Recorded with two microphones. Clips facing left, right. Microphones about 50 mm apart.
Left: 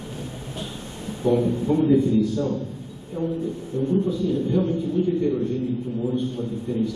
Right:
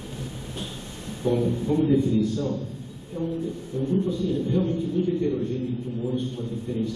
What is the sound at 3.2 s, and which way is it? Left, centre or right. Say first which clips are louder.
Speech: left 3 dB; left.